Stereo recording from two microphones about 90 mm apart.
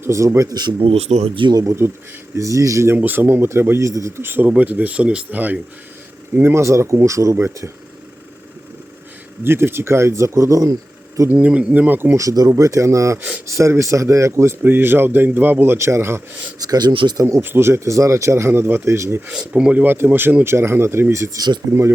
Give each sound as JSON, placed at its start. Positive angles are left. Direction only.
{"t": 0.0, "sound": "speech", "side_deg": -35}
{"t": 0.8, "sound": "speech", "side_deg": -90}
{"t": 1.5, "sound": "speech", "side_deg": -45}
{"t": 2.9, "sound": "a man's voice", "side_deg": -20}
{"t": 4.2, "sound": "speech", "side_deg": -20}
{"t": 9.4, "sound": "speech", "side_deg": -25}
{"t": 11.3, "sound": "speech", "side_deg": -15}
{"t": 12.1, "sound": "a man's voice", "side_deg": -40}
{"t": 16.6, "sound": "speech", "side_deg": -50}
{"t": 17.2, "sound": "speech", "side_deg": -35}
{"t": 17.4, "sound": "speech", "side_deg": -25}
{"t": 19.3, "sound": "a man's voice", "side_deg": -15}